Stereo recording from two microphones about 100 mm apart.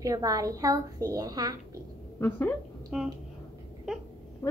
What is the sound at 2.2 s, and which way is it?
Speech, 20° left (ahead or behind).